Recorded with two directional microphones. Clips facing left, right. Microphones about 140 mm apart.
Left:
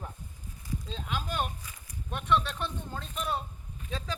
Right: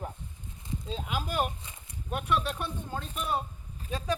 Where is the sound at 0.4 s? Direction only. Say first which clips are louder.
Left 1 dB; 25° right (ahead or behind).